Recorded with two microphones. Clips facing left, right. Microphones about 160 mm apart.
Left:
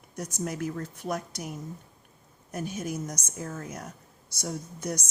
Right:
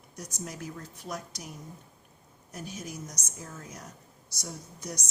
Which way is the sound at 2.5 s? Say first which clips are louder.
Left 7 dB; 55° left (ahead or behind).